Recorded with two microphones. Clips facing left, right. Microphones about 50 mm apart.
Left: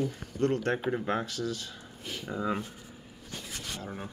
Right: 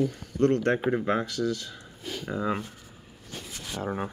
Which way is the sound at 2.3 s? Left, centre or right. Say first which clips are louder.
Right 2 dB; centre.